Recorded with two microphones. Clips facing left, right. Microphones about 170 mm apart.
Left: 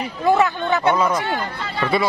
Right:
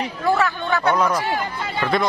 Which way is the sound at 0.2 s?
20° left (ahead or behind).